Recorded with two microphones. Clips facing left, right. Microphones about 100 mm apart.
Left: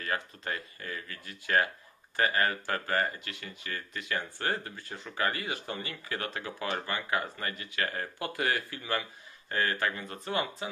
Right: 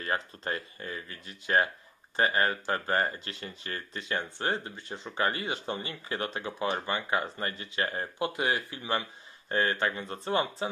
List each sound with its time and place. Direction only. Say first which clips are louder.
0.0 s speech: right 2 dB; 30° right (ahead or behind)